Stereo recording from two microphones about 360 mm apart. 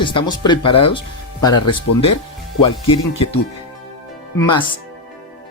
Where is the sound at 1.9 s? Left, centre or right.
Left.